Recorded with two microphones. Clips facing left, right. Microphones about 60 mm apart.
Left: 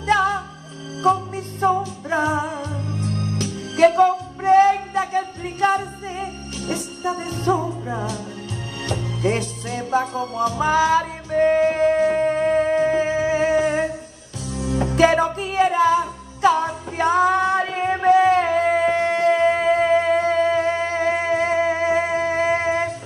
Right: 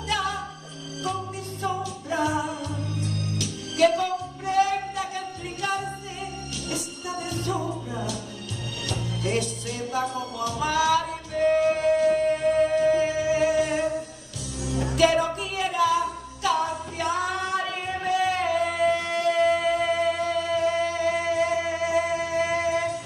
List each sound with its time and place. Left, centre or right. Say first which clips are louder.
0.0 s music: left 9 dB; left
16.4 s female singing: left 7 dB; left